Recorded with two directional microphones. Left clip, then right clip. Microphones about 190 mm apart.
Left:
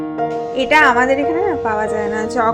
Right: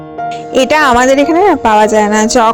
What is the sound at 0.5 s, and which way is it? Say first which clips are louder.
A woman's voice: right 4 dB; 60° right (ahead or behind).